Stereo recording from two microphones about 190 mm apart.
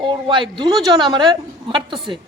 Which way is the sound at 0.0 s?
25° right (ahead or behind).